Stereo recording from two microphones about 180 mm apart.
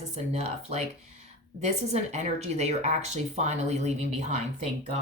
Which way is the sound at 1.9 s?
40° right (ahead or behind).